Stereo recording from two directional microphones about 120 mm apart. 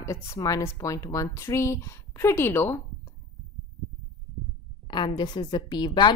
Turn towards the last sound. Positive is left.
turn(degrees=40)  # may be behind; listen again after turning